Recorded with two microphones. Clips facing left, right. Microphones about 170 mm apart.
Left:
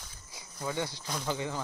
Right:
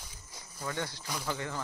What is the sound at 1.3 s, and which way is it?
Speech, 15° left (ahead or behind).